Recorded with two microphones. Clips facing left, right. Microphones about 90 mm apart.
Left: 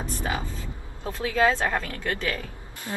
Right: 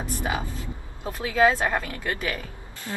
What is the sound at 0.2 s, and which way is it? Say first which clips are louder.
Speech: right 1 dB; 15° right (ahead or behind).